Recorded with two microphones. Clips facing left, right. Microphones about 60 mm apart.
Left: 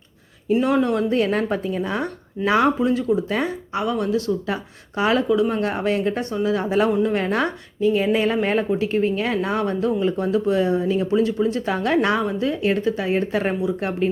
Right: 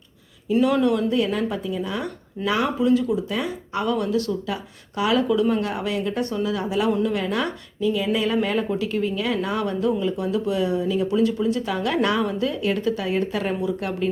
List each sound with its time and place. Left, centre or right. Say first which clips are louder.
0.6 s a woman's voice: right 1 dB; left
3.8 s a woman's voice: even; left